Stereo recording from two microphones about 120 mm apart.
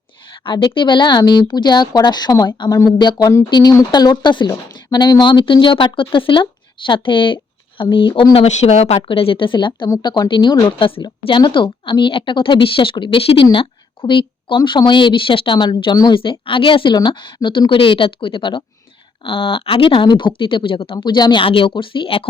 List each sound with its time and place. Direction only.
0.4 s speech: 45° left (ahead or behind)
8.4 s speech: 65° left (ahead or behind)
9.0 s speech: 50° left (ahead or behind)